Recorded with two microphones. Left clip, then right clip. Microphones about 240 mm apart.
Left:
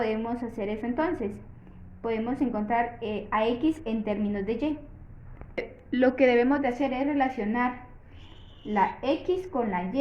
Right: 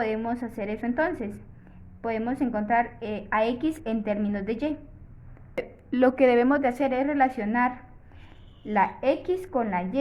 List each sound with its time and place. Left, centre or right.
0.0 s a woman's voice: right